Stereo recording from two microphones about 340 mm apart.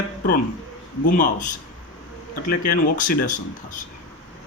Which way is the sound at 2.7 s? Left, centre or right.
Left.